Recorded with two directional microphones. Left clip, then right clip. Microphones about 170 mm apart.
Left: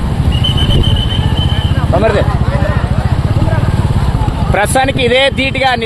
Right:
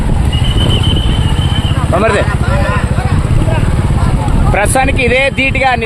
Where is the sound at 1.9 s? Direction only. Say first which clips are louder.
Even; 45° right (ahead or behind).